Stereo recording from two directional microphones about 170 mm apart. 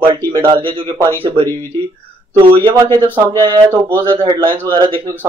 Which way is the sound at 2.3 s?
30° right (ahead or behind).